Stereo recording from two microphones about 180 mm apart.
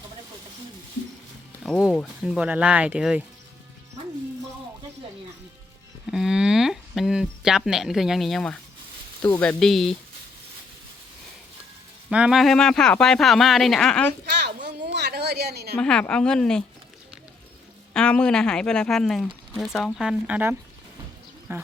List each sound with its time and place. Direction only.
1.6 s speech: 5° left (ahead or behind)
2.2 s speech: 5° right (ahead or behind)
6.1 s speech: centre (ahead or behind)
12.1 s speech: 5° right (ahead or behind)
14.3 s a sound: 70° right (ahead or behind)
15.8 s speech: 5° left (ahead or behind)
17.9 s speech: 5° left (ahead or behind); by 21.6 s 15° right (ahead or behind)